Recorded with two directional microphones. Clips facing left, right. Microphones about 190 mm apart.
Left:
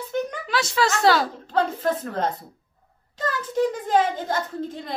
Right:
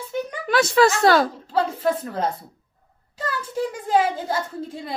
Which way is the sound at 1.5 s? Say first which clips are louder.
Left 1 dB; 10° right (ahead or behind).